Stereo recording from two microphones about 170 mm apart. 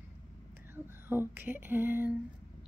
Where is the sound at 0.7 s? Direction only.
15° right (ahead or behind).